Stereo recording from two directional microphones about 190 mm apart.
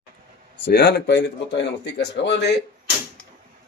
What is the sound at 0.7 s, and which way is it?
Speech, 55° left (ahead or behind).